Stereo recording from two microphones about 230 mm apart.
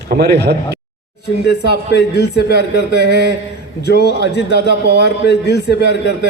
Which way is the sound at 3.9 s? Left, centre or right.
Left.